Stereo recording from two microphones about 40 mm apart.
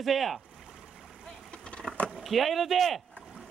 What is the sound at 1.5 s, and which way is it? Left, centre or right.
Vehicle, left.